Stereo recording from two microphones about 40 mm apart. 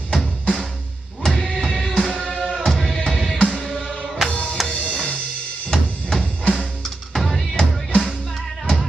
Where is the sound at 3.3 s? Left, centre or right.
Centre.